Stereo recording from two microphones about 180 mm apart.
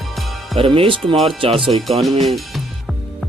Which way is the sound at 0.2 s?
Centre (ahead or behind).